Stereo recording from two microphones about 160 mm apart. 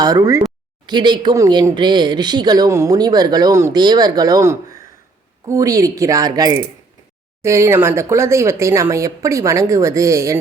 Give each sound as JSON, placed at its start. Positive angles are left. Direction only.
{"t": 0.0, "sound": "speech", "side_deg": -20}